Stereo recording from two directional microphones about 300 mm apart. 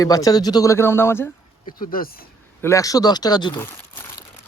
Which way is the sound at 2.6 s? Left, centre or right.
Centre.